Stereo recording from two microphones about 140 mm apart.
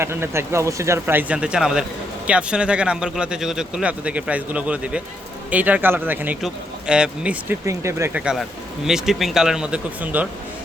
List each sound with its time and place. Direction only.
0.0 s speech: 20° right (ahead or behind)
7.6 s speech: 20° right (ahead or behind)
8.2 s speech: 5° right (ahead or behind)